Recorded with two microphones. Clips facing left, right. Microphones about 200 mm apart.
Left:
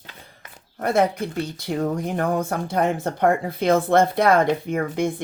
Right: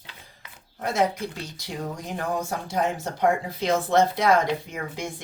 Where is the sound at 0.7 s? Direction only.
55° left (ahead or behind).